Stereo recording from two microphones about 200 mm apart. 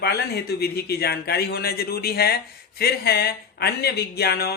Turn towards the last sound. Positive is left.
turn(degrees=50)  # may be behind; listen again after turning